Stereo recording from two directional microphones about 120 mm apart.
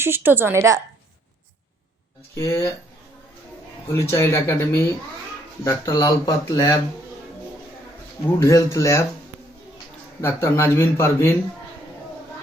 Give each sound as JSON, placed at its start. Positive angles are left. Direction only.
{"t": 0.0, "sound": "a woman's voice", "side_deg": -20}
{"t": 2.3, "sound": "speech", "side_deg": 25}
{"t": 3.8, "sound": "speech", "side_deg": 25}
{"t": 8.4, "sound": "speech", "side_deg": 25}
{"t": 10.2, "sound": "speech", "side_deg": 20}